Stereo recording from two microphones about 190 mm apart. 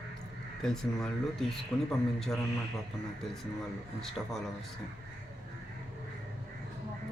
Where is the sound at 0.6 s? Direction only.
Centre (ahead or behind).